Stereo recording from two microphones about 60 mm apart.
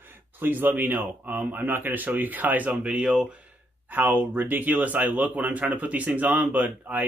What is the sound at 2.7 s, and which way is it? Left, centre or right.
Speech, centre.